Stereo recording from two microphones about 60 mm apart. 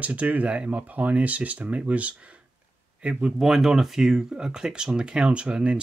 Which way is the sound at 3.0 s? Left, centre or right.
Centre.